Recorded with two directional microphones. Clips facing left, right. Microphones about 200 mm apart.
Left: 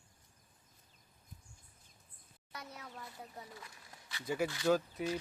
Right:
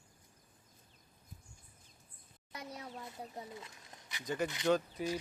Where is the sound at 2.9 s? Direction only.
20° right (ahead or behind).